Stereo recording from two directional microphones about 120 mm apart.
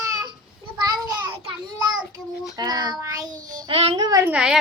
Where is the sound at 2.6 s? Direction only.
35° right (ahead or behind).